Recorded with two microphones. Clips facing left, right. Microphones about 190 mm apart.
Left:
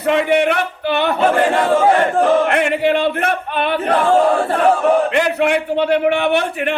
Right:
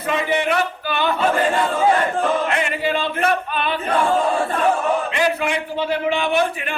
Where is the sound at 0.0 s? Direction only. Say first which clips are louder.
Left 6 dB; 70° left (ahead or behind).